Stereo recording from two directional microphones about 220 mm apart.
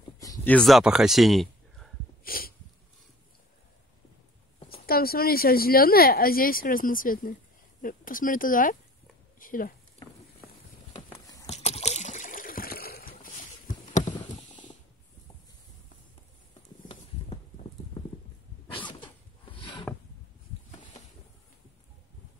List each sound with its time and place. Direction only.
0.2 s speech: 10° left (ahead or behind)
2.2 s a sound: 40° left (ahead or behind)
4.7 s speech: 45° left (ahead or behind)
10.9 s trickle: 25° left (ahead or behind)
16.8 s a sound: 25° left (ahead or behind)
18.7 s sneeze: 20° left (ahead or behind)